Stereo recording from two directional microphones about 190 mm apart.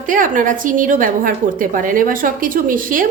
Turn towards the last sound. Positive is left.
turn(degrees=-45)  # may be behind; listen again after turning